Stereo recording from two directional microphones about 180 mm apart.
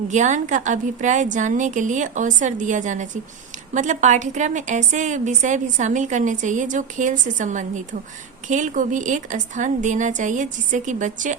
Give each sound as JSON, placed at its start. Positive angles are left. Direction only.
{"t": 0.1, "sound": "a woman's voice", "side_deg": -40}